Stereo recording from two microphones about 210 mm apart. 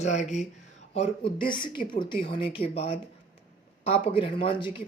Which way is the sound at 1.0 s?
25° left (ahead or behind).